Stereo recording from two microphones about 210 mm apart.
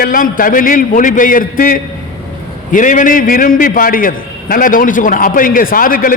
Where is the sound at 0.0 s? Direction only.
40° left (ahead or behind).